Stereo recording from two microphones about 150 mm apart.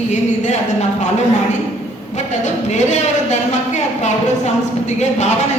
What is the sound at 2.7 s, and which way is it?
A woman's voice, 50° left (ahead or behind).